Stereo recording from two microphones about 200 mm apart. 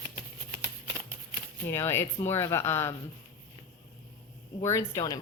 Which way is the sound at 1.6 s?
10° left (ahead or behind).